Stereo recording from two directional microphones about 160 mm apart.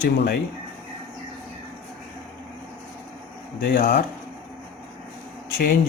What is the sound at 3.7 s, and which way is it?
Speech, 70° left (ahead or behind).